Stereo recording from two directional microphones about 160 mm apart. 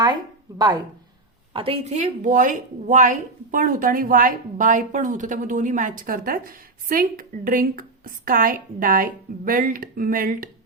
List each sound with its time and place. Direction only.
1.5 s a woman's voice: 35° right (ahead or behind); by 10.5 s 60° right (ahead or behind)